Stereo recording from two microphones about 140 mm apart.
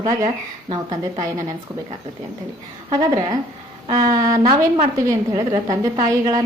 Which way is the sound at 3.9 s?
25° right (ahead or behind).